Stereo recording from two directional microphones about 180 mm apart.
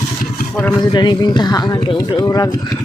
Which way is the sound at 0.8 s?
25° left (ahead or behind).